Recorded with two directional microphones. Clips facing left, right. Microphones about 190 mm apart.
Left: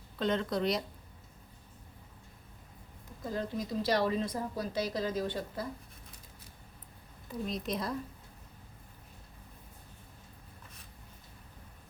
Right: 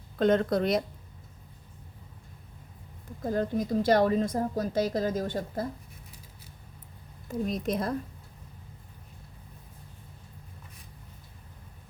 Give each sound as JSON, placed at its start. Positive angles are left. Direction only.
{"t": 0.2, "sound": "a woman's voice", "side_deg": -50}
{"t": 3.2, "sound": "a woman's voice", "side_deg": -50}
{"t": 7.3, "sound": "a woman's voice", "side_deg": -50}